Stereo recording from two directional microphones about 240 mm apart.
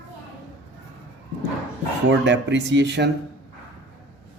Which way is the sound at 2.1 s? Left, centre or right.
Right.